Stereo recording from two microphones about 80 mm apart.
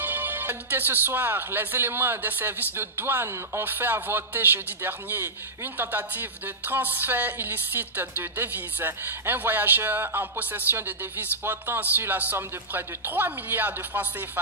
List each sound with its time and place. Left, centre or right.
0.0 s speech: right